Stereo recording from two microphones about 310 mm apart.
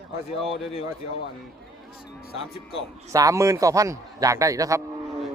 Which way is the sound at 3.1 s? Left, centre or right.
Centre.